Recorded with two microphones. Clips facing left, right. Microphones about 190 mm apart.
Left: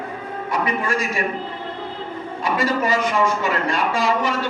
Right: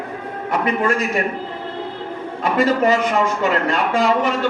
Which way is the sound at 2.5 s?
55° right (ahead or behind).